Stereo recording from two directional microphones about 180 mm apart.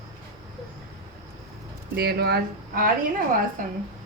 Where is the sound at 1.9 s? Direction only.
60° right (ahead or behind).